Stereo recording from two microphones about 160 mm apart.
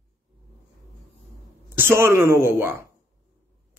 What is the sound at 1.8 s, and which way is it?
A man's voice, 15° right (ahead or behind).